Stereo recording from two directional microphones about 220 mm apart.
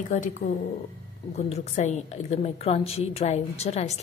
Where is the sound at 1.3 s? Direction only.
30° left (ahead or behind).